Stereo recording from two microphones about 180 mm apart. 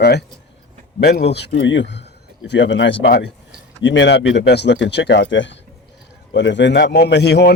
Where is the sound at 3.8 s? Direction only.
85° left.